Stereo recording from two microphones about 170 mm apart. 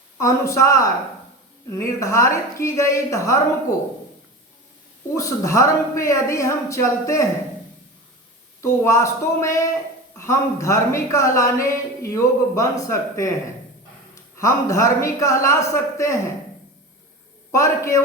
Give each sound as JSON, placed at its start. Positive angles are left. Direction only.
{"t": 0.2, "sound": "a woman's voice", "side_deg": 20}
{"t": 5.1, "sound": "a woman's voice", "side_deg": 20}
{"t": 8.6, "sound": "a woman's voice", "side_deg": 15}
{"t": 14.3, "sound": "a woman's voice", "side_deg": 15}
{"t": 17.5, "sound": "a woman's voice", "side_deg": 15}